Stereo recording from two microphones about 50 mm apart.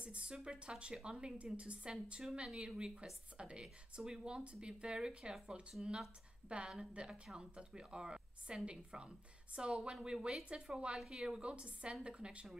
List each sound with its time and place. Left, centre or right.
0.0 s a woman's voice: right